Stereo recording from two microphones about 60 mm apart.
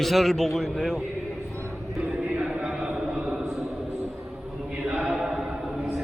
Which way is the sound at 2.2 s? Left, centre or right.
Centre.